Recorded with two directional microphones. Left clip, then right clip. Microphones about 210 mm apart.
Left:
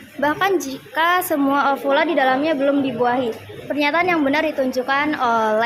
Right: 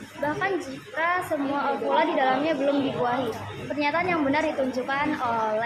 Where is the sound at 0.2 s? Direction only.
60° left (ahead or behind).